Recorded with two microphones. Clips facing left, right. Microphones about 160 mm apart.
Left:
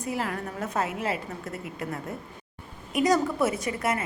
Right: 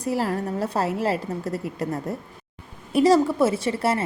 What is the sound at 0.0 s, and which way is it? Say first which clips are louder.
Speech: right 6 dB; 35° right (ahead or behind).